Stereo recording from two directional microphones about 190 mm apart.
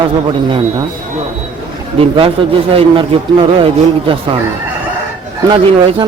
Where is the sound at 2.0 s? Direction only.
30° right (ahead or behind).